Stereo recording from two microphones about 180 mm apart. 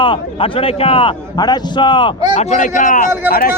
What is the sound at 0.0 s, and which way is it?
A man's voice, 30° left (ahead or behind).